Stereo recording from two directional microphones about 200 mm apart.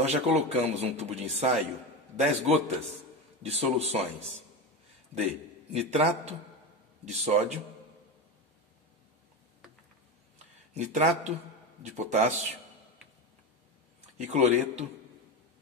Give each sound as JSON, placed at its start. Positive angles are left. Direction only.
{"t": 0.0, "sound": "a man's voice", "side_deg": -30}
{"t": 5.7, "sound": "a man's voice", "side_deg": -35}
{"t": 10.7, "sound": "a man's voice", "side_deg": -35}
{"t": 14.1, "sound": "a man's voice", "side_deg": -35}